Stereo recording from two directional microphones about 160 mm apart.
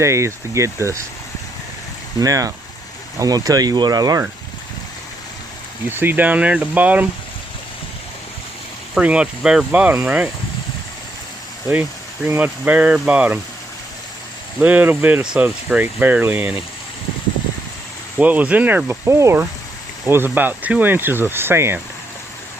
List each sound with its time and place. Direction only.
0.0 s speech: 20° right (ahead or behind)
2.1 s speech: 20° right (ahead or behind)
6.0 s speech: 10° right (ahead or behind)
9.0 s speech: 5° right (ahead or behind)
11.7 s speech: 15° right (ahead or behind)
14.6 s speech: 10° right (ahead or behind)
18.2 s speech: 10° right (ahead or behind)